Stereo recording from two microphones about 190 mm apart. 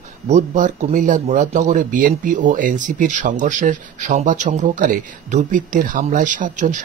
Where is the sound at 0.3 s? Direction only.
40° right (ahead or behind).